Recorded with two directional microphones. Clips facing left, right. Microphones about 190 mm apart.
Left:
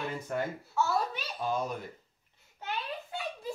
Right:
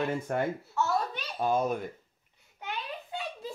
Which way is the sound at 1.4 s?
50° right (ahead or behind).